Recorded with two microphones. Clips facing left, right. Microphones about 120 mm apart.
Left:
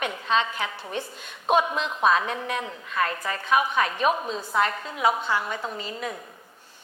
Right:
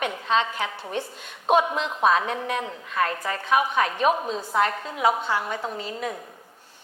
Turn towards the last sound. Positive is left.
turn(degrees=-45)  # may be behind; listen again after turning